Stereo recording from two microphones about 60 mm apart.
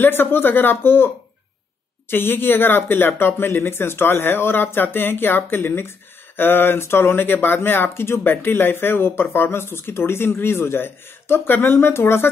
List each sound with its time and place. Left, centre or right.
0.0 s speech: left